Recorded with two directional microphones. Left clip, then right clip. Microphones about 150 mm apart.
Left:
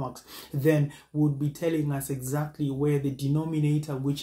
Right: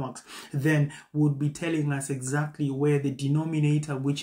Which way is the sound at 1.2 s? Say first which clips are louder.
Even; 15° right (ahead or behind).